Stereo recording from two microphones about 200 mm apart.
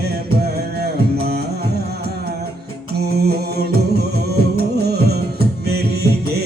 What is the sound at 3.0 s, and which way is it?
Mantra, 55° right (ahead or behind).